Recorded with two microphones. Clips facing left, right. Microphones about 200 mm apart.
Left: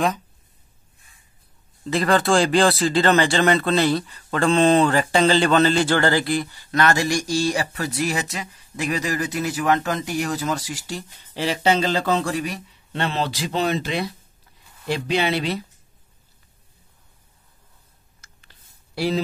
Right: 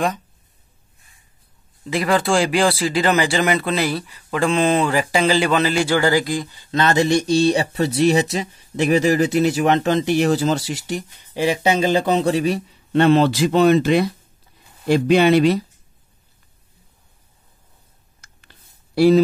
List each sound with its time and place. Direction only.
2.0 s speech: 10° right (ahead or behind); by 12.6 s 25° right (ahead or behind)
12.9 s speech: 55° right (ahead or behind)
18.9 s speech: 45° right (ahead or behind)